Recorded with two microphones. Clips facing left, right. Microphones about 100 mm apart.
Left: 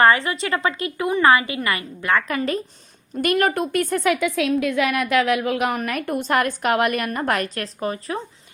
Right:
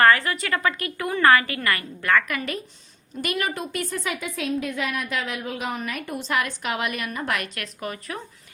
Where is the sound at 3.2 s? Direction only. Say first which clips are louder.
Left 8 dB; 50° left (ahead or behind).